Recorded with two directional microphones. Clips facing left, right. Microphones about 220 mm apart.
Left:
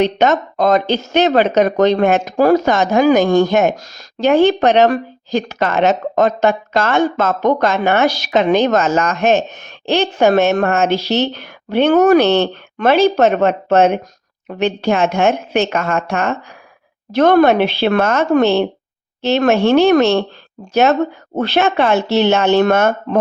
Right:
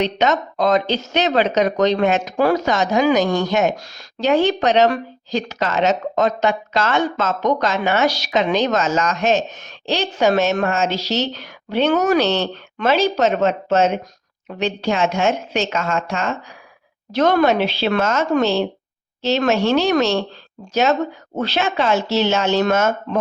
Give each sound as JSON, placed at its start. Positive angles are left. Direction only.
{"t": 0.0, "sound": "speech", "side_deg": 50}
{"t": 21.3, "sound": "speech", "side_deg": 60}